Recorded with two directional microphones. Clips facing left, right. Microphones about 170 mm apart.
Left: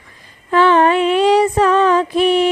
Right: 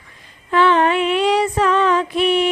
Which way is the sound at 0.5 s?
40° left (ahead or behind).